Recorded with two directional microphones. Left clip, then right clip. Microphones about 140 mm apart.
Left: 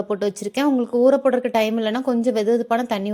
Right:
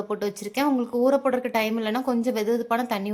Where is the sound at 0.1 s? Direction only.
35° left (ahead or behind).